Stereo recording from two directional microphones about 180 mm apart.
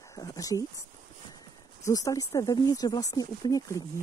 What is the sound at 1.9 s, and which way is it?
Speech, 20° left (ahead or behind).